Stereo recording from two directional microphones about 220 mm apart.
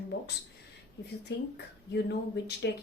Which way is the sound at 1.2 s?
50° left (ahead or behind).